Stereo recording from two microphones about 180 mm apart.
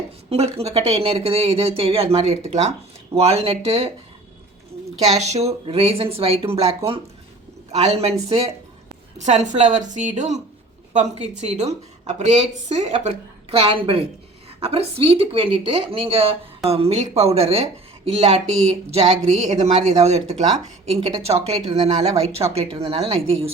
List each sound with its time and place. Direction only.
0.3 s a woman's voice: 35° right (ahead or behind)
4.9 s a woman's voice: 40° right (ahead or behind)